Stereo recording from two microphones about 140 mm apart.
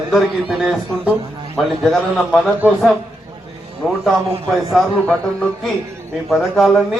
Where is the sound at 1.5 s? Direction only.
5° left (ahead or behind).